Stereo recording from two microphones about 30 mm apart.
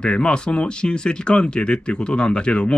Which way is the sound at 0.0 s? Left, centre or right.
Left.